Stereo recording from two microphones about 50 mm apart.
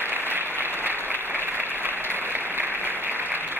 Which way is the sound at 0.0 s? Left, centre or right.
Right.